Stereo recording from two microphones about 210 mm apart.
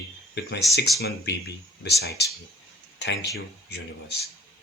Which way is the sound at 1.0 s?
50° left (ahead or behind).